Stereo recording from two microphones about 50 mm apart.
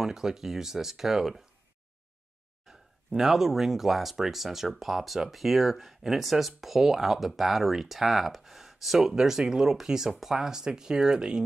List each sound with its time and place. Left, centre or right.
0.0 s speech: centre
2.7 s a sound: centre
3.2 s speech: centre